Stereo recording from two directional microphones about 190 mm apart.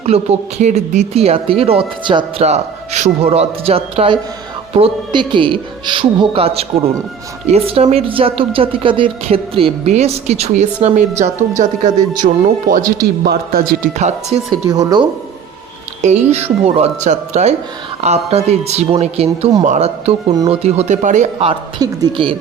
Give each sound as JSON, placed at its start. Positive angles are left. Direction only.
{"t": 0.0, "sound": "a woman's voice", "side_deg": -35}
{"t": 13.2, "sound": "a man's voice", "side_deg": -55}
{"t": 14.0, "sound": "speech", "side_deg": -35}
{"t": 14.7, "sound": "a woman's voice", "side_deg": -20}
{"t": 16.0, "sound": "speech", "side_deg": -35}
{"t": 21.3, "sound": "a woman's voice", "side_deg": -25}